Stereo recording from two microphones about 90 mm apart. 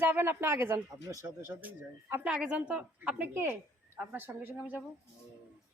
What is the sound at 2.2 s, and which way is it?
A woman's voice, 10° right (ahead or behind).